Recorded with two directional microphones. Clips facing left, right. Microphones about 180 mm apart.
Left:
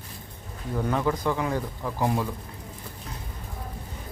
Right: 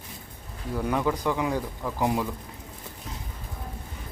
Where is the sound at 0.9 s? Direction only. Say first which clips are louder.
Even; 10° right (ahead or behind).